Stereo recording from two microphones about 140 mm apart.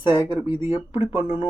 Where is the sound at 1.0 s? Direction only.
40° left (ahead or behind).